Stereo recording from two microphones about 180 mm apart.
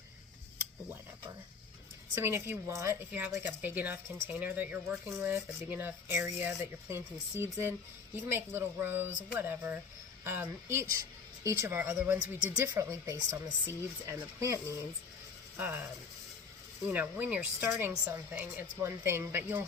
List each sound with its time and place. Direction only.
2.1 s speech: 15° right (ahead or behind)
15.5 s speech: 10° right (ahead or behind)
16.9 s speech: 10° right (ahead or behind)